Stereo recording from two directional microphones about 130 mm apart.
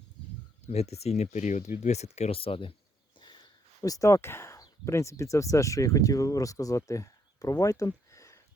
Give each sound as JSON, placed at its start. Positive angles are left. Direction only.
{"t": 0.7, "sound": "speech", "side_deg": 55}
{"t": 3.2, "sound": "a sound", "side_deg": 35}
{"t": 3.8, "sound": "speech", "side_deg": 25}